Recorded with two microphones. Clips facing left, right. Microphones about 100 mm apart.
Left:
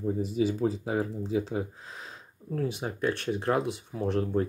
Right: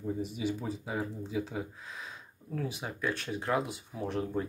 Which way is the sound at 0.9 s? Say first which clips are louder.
Left 6 dB; 45° left (ahead or behind).